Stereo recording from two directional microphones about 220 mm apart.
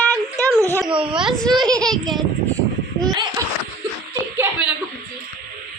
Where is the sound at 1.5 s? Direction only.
20° right (ahead or behind).